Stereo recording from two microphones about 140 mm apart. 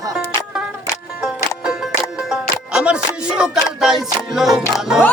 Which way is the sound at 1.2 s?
5° right (ahead or behind).